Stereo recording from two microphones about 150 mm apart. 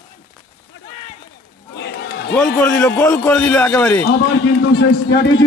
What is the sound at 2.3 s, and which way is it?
A man's voice, 10° left (ahead or behind).